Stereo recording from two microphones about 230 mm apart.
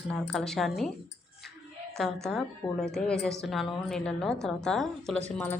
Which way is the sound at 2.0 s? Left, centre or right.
Centre.